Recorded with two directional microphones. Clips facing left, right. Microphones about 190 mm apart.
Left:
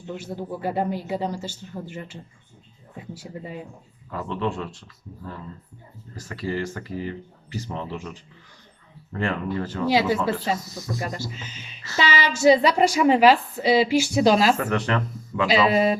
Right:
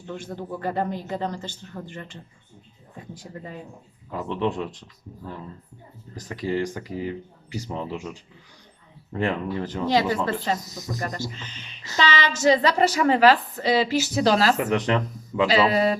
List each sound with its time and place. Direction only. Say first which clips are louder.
0.1 s speech: left 1 dB; 10° left (ahead or behind)
4.1 s speech: right 1 dB; 15° right (ahead or behind)
9.8 s speech: left 1 dB; 10° left (ahead or behind)
10.7 s speech: left 1 dB; 20° right (ahead or behind)
11.0 s speech: even; 10° left (ahead or behind)
14.6 s speech: right 2 dB; 15° right (ahead or behind)
15.4 s speech: left 1 dB; 10° left (ahead or behind)